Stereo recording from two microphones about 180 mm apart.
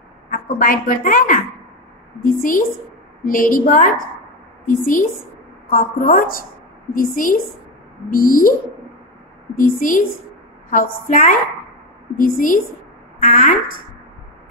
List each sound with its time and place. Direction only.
0.3 s a woman's voice: 50° left (ahead or behind)
9.6 s a woman's voice: 50° left (ahead or behind)